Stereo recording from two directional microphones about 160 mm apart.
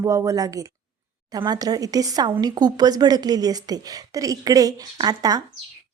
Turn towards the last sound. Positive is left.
turn(degrees=-25)  # may be behind; listen again after turning